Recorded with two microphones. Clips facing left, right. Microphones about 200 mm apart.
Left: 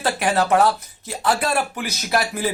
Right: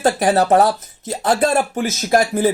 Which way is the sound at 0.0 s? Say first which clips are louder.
Right 5 dB; 40° right (ahead or behind).